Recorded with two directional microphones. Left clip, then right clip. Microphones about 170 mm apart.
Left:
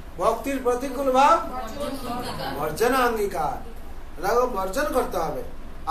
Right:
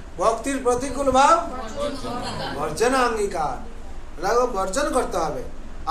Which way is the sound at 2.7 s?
5° right (ahead or behind).